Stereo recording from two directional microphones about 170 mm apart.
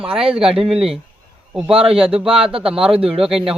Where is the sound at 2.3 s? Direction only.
35° right (ahead or behind).